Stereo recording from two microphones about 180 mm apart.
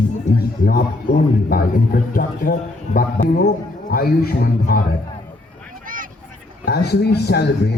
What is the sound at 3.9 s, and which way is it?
Speech, 60° left (ahead or behind).